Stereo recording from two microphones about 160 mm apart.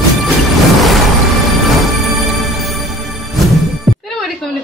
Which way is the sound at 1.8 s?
Centre (ahead or behind).